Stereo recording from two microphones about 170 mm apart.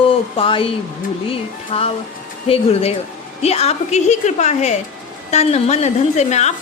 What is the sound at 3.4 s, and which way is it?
A woman's voice, 40° left (ahead or behind).